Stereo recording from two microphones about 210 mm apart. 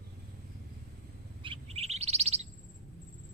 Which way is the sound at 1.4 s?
25° right (ahead or behind).